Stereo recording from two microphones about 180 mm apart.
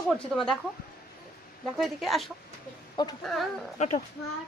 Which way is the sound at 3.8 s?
40° left (ahead or behind).